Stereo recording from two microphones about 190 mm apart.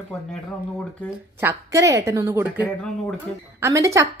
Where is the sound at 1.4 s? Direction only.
15° right (ahead or behind).